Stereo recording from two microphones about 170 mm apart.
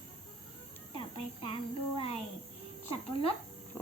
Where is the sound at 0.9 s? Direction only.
30° left (ahead or behind).